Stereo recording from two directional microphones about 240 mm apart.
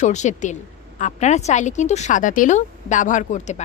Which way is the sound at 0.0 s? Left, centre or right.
Left.